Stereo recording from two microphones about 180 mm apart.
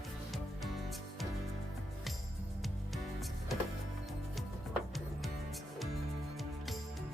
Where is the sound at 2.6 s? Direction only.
Centre (ahead or behind).